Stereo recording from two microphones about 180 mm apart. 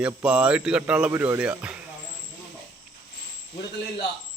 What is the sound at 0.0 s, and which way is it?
Speech, 5° right (ahead or behind).